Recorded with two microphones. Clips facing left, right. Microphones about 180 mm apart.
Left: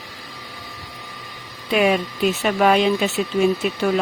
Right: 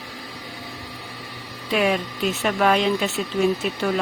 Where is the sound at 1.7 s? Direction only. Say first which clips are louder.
Left 3 dB; 10° left (ahead or behind).